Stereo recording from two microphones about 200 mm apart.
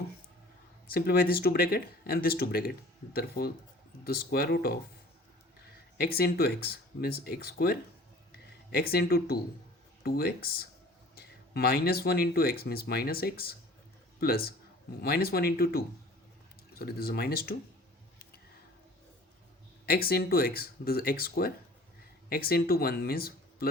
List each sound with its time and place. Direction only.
0.9 s speech: 50° left (ahead or behind)
6.0 s speech: 50° left (ahead or behind)
19.8 s speech: 50° left (ahead or behind)